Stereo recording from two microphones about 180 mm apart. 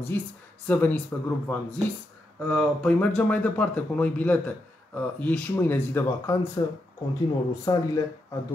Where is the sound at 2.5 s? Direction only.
5° left (ahead or behind); by 7.8 s 25° left (ahead or behind).